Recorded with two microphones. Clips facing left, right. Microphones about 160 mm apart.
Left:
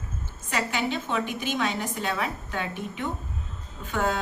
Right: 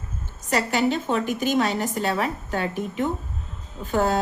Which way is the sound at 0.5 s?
40° right (ahead or behind).